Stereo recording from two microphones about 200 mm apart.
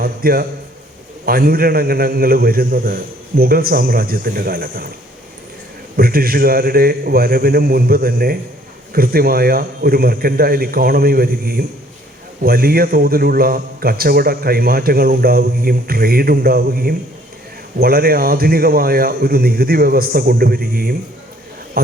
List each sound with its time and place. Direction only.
0.0 s a sound: 45° right (ahead or behind)
1.2 s a man's voice: 50° right (ahead or behind)
6.0 s a man's voice: 50° right (ahead or behind)